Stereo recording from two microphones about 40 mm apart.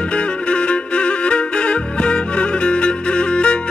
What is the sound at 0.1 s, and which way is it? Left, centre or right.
Music, left.